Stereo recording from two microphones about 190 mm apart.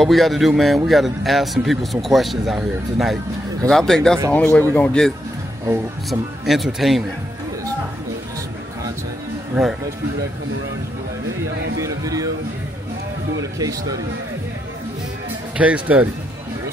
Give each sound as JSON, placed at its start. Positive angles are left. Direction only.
{"t": 0.0, "sound": "speech", "side_deg": 0}
{"t": 11.8, "sound": "speech", "side_deg": -20}
{"t": 13.4, "sound": "speech", "side_deg": -20}
{"t": 15.5, "sound": "speech", "side_deg": -5}